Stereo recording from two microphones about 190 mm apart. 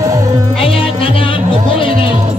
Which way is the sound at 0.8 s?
30° left (ahead or behind).